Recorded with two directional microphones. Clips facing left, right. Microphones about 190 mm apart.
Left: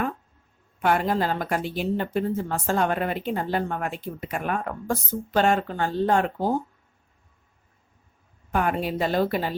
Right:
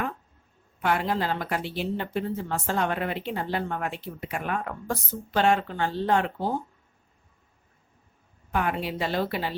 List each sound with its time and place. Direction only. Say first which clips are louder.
0.8 s a woman's voice: left 3 dB; 45° left (ahead or behind)
8.5 s a woman's voice: left 3 dB; 45° left (ahead or behind)